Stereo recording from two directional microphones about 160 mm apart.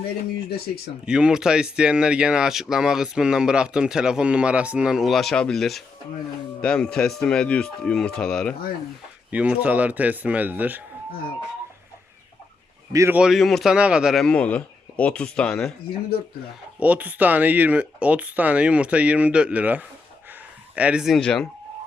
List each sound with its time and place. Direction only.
1.0 s speech: 5° right (ahead or behind)
9.3 s speech: 10° right (ahead or behind)
12.9 s a man's voice: 20° right (ahead or behind)
13.1 s speech: centre (ahead or behind)
16.8 s speech: 10° right (ahead or behind)